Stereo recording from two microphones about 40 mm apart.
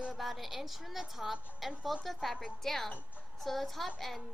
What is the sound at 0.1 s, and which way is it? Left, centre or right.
A woman's voice, centre.